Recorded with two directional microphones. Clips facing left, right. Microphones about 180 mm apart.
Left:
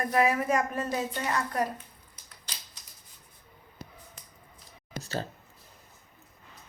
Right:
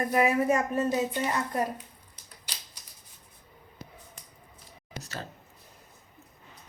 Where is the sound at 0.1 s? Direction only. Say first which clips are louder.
Right 1 dB; 20° right (ahead or behind).